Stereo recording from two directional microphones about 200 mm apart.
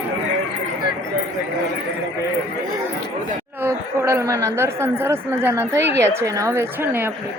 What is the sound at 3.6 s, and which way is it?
Speech, 15° right (ahead or behind).